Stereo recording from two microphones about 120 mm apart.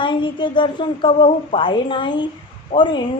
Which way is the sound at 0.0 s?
40° left (ahead or behind).